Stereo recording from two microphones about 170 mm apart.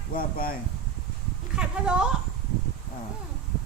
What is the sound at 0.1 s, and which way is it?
Speech, 55° left (ahead or behind).